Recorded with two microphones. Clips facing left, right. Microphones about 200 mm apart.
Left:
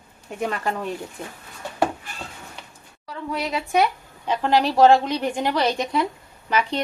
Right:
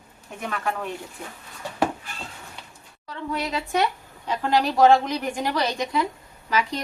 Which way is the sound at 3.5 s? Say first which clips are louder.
Left 4 dB; 20° left (ahead or behind).